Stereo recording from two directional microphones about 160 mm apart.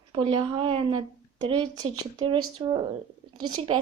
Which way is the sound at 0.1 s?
30° right (ahead or behind).